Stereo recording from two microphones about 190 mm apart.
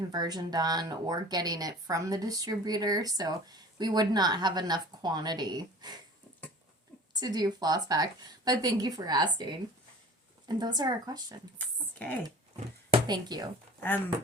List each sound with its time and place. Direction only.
0.1 s speech: 20° right (ahead or behind)
7.1 s speech: 20° right (ahead or behind)
11.5 s a sound: 10° left (ahead or behind)
13.1 s speech: 20° right (ahead or behind)